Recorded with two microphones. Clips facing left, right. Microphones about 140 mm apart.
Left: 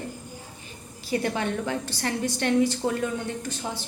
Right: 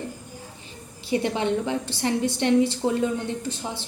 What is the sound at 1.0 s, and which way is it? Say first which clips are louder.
A woman's voice: right 3 dB; 20° right (ahead or behind).